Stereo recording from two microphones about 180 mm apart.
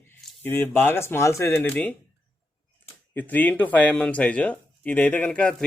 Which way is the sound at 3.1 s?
10° left (ahead or behind).